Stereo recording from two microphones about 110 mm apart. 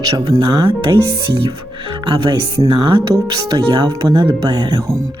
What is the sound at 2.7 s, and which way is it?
Speech, 50° right (ahead or behind).